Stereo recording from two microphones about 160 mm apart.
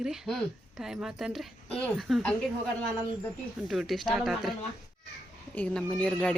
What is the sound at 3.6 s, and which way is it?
Speech, centre (ahead or behind).